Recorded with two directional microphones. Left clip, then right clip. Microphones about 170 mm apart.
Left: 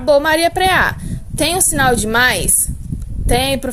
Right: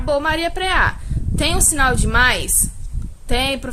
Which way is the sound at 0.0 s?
35° left (ahead or behind).